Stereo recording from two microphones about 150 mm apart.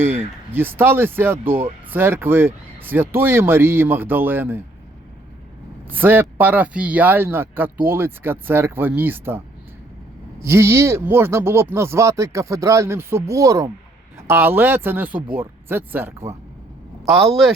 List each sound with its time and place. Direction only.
0.5 s speech: 15° right (ahead or behind)
5.9 s speech: 15° right (ahead or behind)
10.4 s speech: 15° right (ahead or behind)